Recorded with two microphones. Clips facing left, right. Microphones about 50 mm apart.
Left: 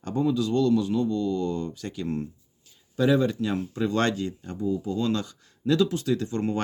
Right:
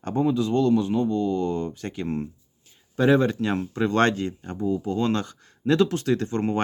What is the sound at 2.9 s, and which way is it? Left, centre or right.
Speech, right.